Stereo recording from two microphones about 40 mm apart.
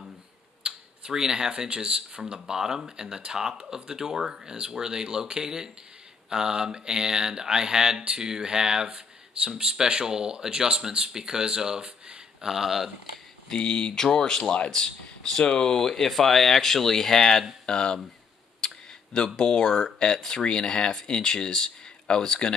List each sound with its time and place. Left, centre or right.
0.7 s speech: centre
13.5 s speech: left
15.7 s speech: centre
18.6 s clicking: centre
19.4 s speech: centre